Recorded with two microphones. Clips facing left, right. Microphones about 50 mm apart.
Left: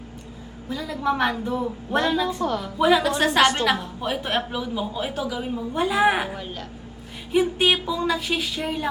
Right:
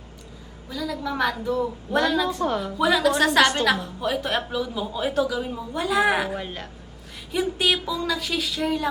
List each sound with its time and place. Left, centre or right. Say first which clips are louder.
0.7 s a woman's voice: left 3 dB; left
6.3 s a woman's voice: right 2 dB; centre
7.3 s speech: left 3 dB; left